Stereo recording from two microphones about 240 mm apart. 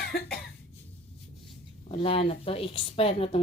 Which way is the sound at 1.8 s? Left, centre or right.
Left.